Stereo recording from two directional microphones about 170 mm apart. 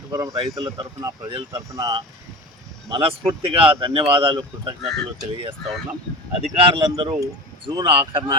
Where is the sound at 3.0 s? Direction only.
35° right (ahead or behind).